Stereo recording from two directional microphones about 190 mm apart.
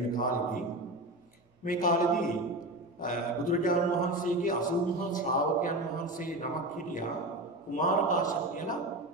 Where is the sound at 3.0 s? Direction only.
45° left (ahead or behind).